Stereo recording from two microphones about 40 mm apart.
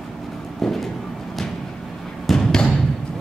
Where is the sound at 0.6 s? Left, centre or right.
Centre.